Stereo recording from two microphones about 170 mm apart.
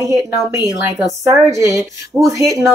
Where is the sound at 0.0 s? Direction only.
20° right (ahead or behind).